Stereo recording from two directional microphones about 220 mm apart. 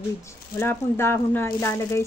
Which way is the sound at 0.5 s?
10° left (ahead or behind).